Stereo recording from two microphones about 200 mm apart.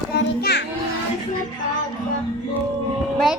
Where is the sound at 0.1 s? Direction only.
55° left (ahead or behind).